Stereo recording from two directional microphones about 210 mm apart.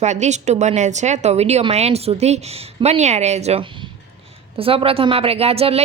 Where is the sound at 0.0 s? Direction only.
35° right (ahead or behind).